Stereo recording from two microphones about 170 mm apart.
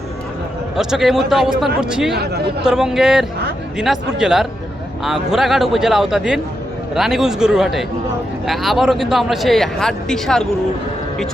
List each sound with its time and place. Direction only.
0.8 s a man's voice: centre (ahead or behind)
2.1 s speech: 70° right (ahead or behind)
2.6 s a man's voice: 5° right (ahead or behind)